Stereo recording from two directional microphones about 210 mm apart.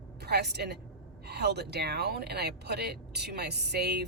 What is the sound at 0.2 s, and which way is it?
A woman's voice, 50° right (ahead or behind).